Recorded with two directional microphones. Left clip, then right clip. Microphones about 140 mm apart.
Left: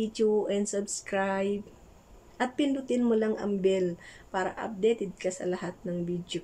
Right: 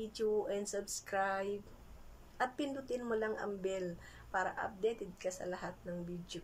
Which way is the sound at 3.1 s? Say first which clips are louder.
Left 9 dB; 45° left (ahead or behind).